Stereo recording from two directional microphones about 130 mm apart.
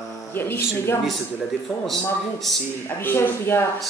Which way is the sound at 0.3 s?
15° left (ahead or behind).